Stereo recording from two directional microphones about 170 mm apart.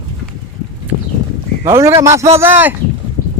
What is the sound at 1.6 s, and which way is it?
Speech, 15° right (ahead or behind).